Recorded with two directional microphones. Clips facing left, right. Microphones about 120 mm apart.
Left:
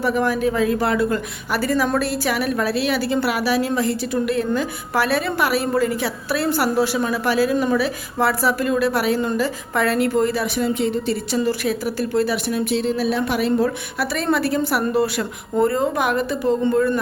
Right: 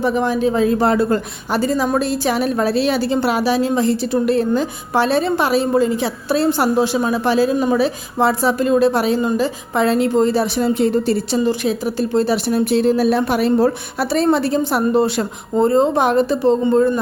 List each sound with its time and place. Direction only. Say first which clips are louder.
0.0 s speech: right 2 dB; 20° right (ahead or behind); by 11.3 s 40° right (ahead or behind)
11.3 s speech: right 3 dB; 20° right (ahead or behind)